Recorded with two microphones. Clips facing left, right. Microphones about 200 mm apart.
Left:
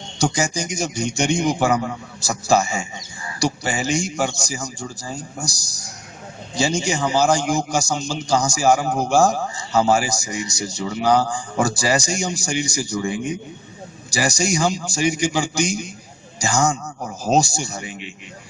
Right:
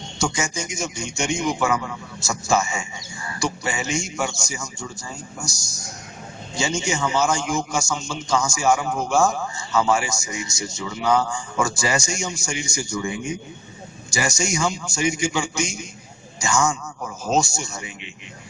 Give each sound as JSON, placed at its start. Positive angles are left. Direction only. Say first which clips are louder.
{"t": 0.2, "sound": "a man's voice", "louder": "left 4 dB", "side_deg": 35}